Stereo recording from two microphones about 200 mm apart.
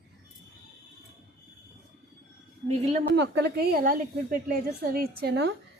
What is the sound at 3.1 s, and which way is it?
A woman's voice, 60° right (ahead or behind).